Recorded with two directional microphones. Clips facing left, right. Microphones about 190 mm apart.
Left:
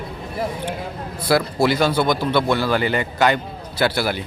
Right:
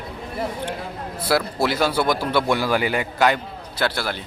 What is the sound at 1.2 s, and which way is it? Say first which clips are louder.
A man's voice: left 3 dB; centre (ahead or behind).